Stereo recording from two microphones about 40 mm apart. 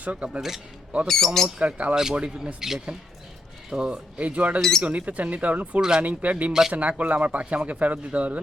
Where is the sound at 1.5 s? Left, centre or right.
Right.